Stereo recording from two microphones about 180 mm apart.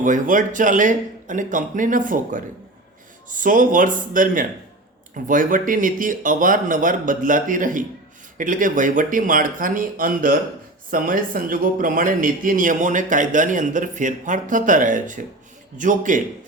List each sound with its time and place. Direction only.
0.0 s a man's voice: 45° right (ahead or behind)